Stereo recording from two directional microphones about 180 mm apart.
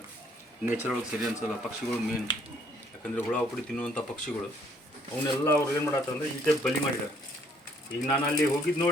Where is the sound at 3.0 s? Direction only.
5° left (ahead or behind).